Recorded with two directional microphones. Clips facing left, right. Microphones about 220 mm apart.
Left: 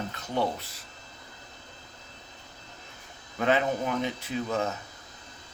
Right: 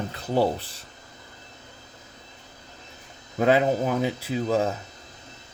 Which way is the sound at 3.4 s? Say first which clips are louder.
Right 5 dB; 35° right (ahead or behind).